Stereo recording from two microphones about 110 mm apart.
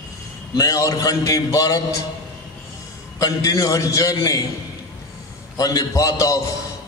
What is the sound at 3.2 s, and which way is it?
A man's voice, 30° left (ahead or behind).